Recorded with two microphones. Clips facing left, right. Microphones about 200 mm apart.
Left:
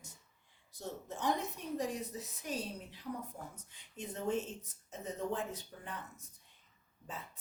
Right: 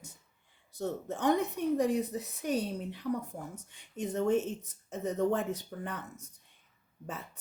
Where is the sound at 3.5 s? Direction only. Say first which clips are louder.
Right 7 dB; 75° right (ahead or behind).